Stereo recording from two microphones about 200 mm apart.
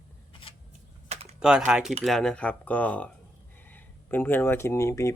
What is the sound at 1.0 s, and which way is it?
Typing, 35° right (ahead or behind).